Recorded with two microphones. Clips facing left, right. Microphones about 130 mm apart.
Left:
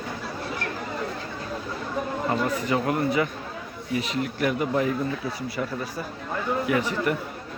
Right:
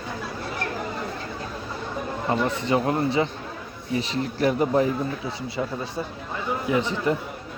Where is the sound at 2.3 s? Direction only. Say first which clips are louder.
Right 3 dB; 25° right (ahead or behind).